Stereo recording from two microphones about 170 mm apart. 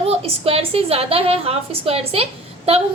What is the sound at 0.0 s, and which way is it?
A woman's voice, 35° right (ahead or behind).